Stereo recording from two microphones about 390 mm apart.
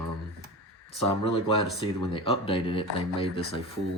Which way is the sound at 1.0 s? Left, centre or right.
Centre.